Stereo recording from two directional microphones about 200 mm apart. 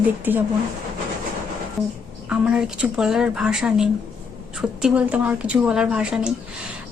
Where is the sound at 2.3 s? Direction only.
5° right (ahead or behind).